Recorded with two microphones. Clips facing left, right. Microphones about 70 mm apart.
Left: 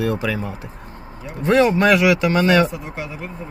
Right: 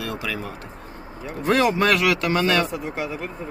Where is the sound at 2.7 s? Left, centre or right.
Centre.